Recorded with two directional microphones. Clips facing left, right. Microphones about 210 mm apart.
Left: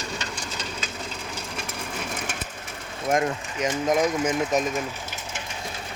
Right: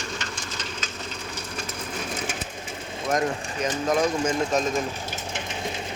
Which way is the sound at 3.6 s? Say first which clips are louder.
Left 1 dB; 20° left (ahead or behind).